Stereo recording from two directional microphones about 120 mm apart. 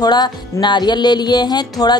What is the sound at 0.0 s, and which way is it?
Music, 35° left (ahead or behind).